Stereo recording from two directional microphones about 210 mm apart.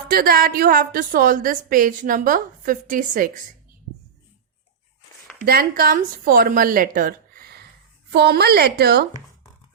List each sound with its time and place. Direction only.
0.1 s a woman's voice: 45° right (ahead or behind)
5.4 s a woman's voice: 45° right (ahead or behind)